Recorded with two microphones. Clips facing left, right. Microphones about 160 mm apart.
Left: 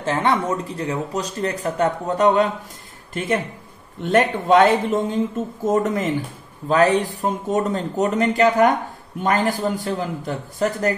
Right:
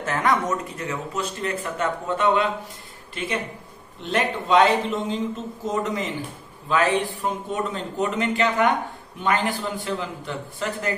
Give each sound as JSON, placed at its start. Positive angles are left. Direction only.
{"t": 0.0, "sound": "speech", "side_deg": 30}
{"t": 4.0, "sound": "a man's voice", "side_deg": 50}
{"t": 6.7, "sound": "speech", "side_deg": 40}